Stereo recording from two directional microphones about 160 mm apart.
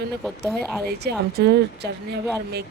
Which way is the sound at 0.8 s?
90° right.